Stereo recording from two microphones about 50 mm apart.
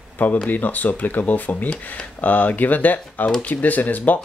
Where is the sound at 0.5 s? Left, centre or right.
Left.